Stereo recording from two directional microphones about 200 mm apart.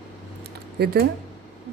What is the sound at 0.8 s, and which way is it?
Speech, 55° right (ahead or behind).